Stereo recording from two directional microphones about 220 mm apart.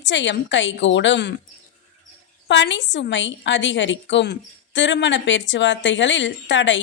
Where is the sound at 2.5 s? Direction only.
55° left (ahead or behind).